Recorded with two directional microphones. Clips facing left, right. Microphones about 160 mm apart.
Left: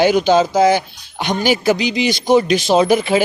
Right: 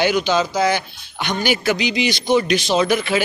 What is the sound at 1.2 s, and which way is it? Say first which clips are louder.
A man's voice: left 4 dB; 40° left (ahead or behind).